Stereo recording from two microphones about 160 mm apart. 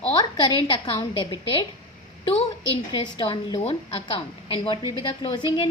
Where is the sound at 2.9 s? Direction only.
30° left (ahead or behind).